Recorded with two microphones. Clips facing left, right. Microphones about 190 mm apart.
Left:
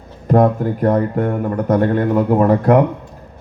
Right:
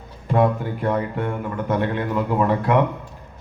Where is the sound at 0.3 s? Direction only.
45° left (ahead or behind).